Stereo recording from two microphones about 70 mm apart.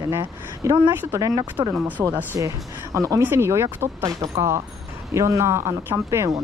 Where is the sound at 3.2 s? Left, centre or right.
Right.